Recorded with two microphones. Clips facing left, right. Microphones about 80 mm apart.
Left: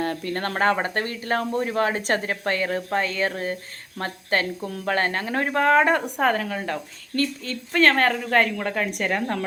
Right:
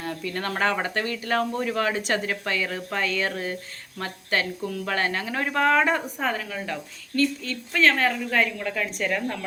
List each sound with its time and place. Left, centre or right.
0.0 s speech: left
5.9 s a woman's voice: left
7.9 s a woman's voice: left
9.0 s speech: left